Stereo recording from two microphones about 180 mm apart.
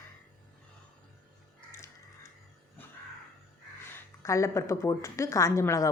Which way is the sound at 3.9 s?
15° left (ahead or behind).